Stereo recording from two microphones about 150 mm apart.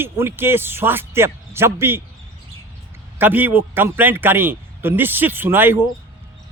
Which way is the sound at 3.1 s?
10° right (ahead or behind).